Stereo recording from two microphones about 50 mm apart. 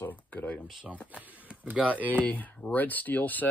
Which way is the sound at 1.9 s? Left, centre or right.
Left.